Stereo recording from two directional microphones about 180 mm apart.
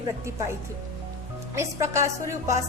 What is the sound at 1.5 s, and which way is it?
A woman's voice, 15° right (ahead or behind).